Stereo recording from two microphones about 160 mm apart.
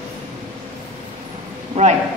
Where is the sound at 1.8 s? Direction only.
40° right (ahead or behind).